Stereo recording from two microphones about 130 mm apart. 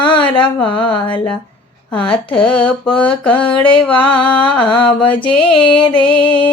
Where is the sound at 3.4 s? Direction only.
40° left (ahead or behind).